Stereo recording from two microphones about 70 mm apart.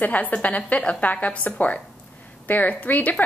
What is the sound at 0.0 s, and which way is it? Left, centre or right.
A woman's voice, left.